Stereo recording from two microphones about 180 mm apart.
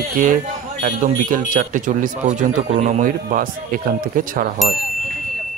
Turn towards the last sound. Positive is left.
turn(degrees=-50)  # may be behind; listen again after turning